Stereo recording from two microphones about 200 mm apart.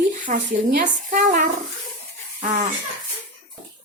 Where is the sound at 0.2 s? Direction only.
40° right (ahead or behind).